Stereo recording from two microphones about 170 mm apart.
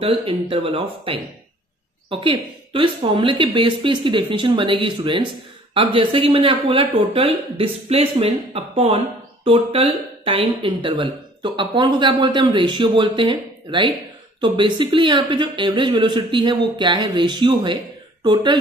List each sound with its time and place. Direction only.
0.0 s speech: 35° right (ahead or behind)